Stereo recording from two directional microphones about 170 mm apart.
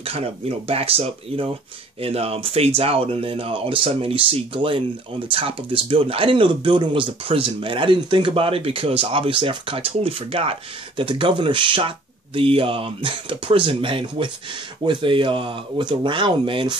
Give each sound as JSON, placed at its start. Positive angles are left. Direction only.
{"t": 0.0, "sound": "speech", "side_deg": -35}